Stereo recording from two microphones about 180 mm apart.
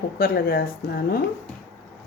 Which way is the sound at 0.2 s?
55° left (ahead or behind).